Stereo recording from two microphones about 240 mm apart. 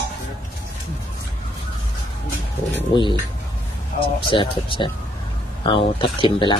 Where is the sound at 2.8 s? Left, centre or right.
Centre.